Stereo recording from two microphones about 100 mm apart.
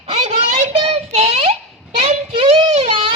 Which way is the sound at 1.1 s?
90° right.